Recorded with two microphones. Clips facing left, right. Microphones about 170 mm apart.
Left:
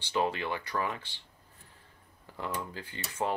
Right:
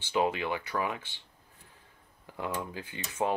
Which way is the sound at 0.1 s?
15° right (ahead or behind).